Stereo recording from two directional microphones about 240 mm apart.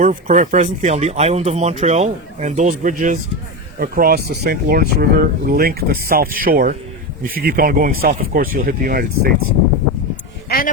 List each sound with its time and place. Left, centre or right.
0.0 s speech: right